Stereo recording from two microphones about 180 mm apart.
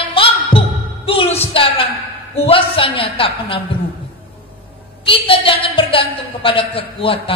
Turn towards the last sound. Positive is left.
turn(degrees=30)  # may be behind; listen again after turning